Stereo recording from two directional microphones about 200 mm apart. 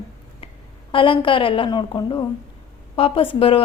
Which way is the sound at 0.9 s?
25° left (ahead or behind).